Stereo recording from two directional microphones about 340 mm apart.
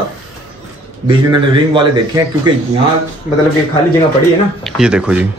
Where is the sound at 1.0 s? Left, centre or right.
Centre.